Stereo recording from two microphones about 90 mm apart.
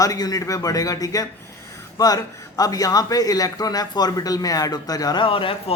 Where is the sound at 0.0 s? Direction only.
45° left (ahead or behind).